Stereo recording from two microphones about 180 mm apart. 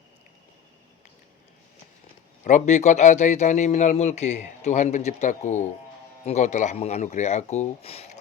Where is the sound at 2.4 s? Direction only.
45° left (ahead or behind).